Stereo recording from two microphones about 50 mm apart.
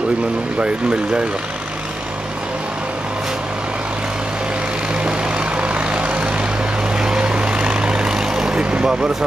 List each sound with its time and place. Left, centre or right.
0.6 s speech: right
4.9 s vehicle: right